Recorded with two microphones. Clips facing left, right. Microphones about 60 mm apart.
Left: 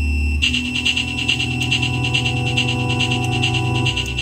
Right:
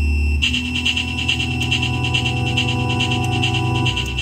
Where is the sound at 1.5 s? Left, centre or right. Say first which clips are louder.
Even; centre.